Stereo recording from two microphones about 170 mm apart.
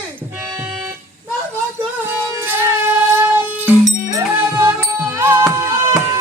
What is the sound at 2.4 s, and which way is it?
Music, 15° right (ahead or behind).